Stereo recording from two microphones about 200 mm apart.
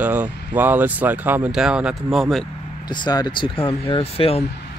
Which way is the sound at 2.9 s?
20° left (ahead or behind).